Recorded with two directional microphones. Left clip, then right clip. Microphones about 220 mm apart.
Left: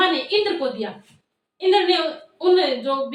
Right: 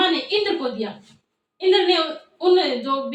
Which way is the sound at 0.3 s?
10° right (ahead or behind).